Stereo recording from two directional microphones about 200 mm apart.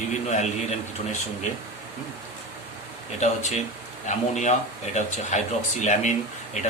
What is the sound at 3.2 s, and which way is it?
Speech, 35° left (ahead or behind).